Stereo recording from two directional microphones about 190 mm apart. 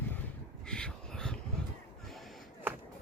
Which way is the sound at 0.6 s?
5° left (ahead or behind).